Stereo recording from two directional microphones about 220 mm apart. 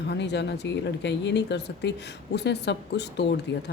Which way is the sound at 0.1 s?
50° left (ahead or behind).